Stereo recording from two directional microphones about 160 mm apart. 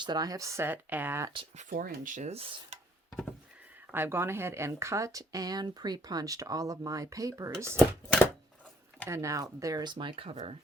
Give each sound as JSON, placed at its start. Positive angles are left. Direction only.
{"t": 0.0, "sound": "speech", "side_deg": -25}
{"t": 1.7, "sound": "speech", "side_deg": -60}
{"t": 3.9, "sound": "speech", "side_deg": -15}
{"t": 7.8, "sound": "chopping", "side_deg": 10}
{"t": 9.0, "sound": "speech", "side_deg": -20}